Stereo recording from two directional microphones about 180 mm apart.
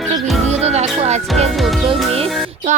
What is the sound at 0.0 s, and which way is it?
Music, centre (ahead or behind).